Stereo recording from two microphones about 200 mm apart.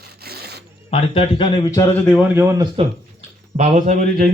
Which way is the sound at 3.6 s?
35° right (ahead or behind).